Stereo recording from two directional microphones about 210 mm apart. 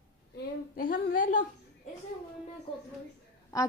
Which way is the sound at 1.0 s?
40° left (ahead or behind).